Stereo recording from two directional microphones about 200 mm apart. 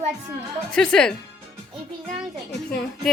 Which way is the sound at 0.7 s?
5° left (ahead or behind).